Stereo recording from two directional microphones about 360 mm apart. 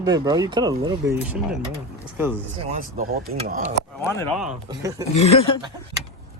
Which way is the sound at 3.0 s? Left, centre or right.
Right.